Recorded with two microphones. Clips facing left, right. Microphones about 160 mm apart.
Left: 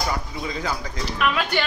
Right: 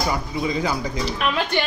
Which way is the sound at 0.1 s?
15° right (ahead or behind).